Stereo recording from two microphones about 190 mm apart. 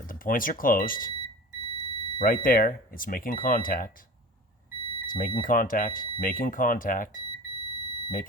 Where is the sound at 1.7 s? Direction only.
30° right (ahead or behind).